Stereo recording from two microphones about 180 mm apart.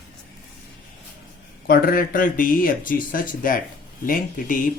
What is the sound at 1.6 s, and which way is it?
Speech, 55° left (ahead or behind).